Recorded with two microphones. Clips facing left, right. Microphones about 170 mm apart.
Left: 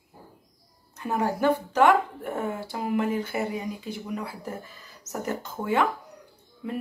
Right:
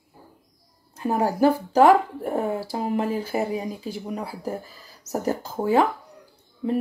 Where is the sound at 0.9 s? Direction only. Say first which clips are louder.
Right 4 dB; 35° right (ahead or behind).